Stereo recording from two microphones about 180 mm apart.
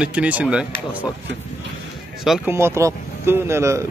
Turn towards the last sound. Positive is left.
turn(degrees=-15)  # may be behind; listen again after turning